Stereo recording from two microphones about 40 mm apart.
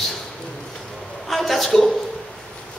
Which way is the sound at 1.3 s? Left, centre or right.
Centre.